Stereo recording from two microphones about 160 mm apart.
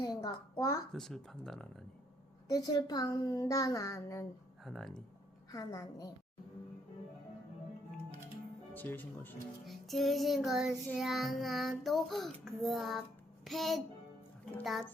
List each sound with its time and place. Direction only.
0.0 s a sound: 25° left (ahead or behind)
0.5 s a woman's voice: 20° left (ahead or behind)
0.9 s child singing: centre (ahead or behind)
2.5 s a woman's voice: 25° left (ahead or behind)
4.6 s child singing: centre (ahead or behind)
5.5 s a woman's voice: 20° left (ahead or behind)
8.7 s speech: 10° left (ahead or behind)
9.6 s child singing: centre (ahead or behind)
13.4 s a child's voice: centre (ahead or behind)
14.6 s child singing: centre (ahead or behind)